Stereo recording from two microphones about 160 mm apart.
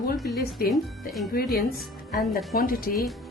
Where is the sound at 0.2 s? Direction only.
70° left (ahead or behind).